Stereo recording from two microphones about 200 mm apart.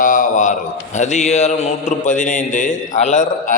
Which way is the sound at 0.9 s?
35° left (ahead or behind).